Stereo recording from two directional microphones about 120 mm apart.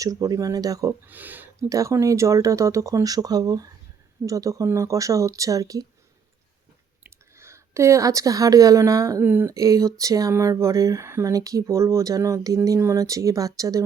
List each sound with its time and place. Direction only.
0.0 s speech: 30° right (ahead or behind)
1.0 s speech: 15° right (ahead or behind)
1.7 s speech: 25° right (ahead or behind)
7.0 s speech: 20° right (ahead or behind)
9.5 s speech: 25° right (ahead or behind)